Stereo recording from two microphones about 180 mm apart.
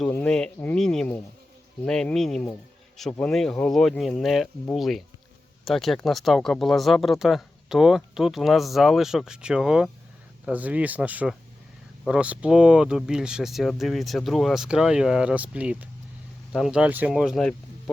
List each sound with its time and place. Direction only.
0.0 s speech: 5° left (ahead or behind)